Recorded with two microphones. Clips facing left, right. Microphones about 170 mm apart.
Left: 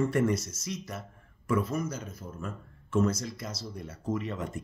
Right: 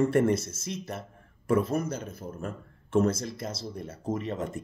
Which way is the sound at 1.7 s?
60° right (ahead or behind).